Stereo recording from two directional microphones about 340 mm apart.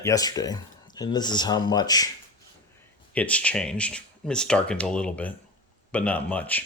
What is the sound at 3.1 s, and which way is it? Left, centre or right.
Speech, centre.